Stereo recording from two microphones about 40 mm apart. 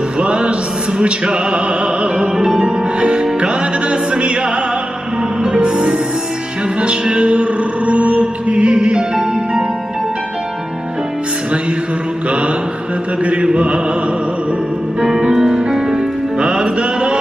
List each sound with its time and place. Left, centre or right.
0.2 s music: right
2.3 s music: centre
3.0 s music: right
6.8 s chant: right
13.2 s chant: right
15.0 s music: centre